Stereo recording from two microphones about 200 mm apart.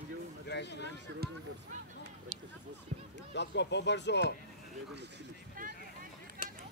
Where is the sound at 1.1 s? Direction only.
60° right (ahead or behind).